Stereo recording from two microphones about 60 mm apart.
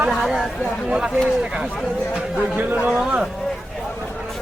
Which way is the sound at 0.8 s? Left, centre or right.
Centre.